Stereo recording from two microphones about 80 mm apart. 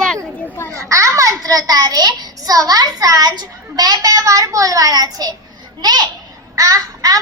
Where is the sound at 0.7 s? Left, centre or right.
Right.